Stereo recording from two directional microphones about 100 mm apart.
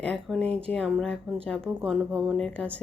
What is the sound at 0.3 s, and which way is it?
Speech, 5° left (ahead or behind).